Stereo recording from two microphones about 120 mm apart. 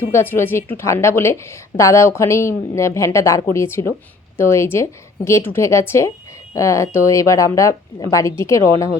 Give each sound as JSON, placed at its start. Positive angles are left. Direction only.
{"t": 0.1, "sound": "a woman's voice", "side_deg": 20}